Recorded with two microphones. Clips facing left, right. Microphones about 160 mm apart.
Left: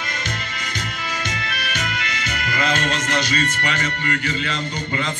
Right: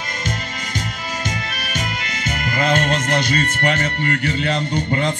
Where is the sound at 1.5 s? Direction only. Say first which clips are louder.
Even; 40° right (ahead or behind).